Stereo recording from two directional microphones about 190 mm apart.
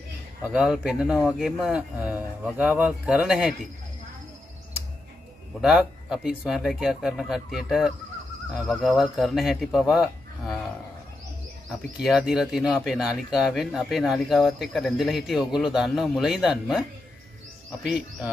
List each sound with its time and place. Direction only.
0.4 s speech: 5° right (ahead or behind)
5.6 s speech: 5° right (ahead or behind)
12.0 s speech: 5° right (ahead or behind)
17.8 s speech: 5° right (ahead or behind)